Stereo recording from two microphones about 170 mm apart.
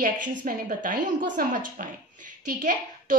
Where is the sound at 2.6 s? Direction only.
50° right (ahead or behind).